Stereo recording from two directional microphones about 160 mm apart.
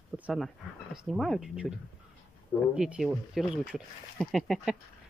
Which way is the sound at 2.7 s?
5° right (ahead or behind).